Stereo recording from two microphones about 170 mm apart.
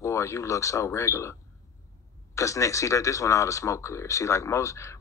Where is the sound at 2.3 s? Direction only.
20° left (ahead or behind).